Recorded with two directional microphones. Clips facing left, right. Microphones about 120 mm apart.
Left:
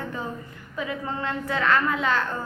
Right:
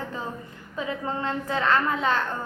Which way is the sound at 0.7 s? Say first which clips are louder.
Right 1 dB; 30° right (ahead or behind).